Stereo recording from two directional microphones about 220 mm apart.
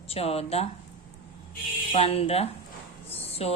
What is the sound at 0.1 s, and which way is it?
Speech, 25° left (ahead or behind).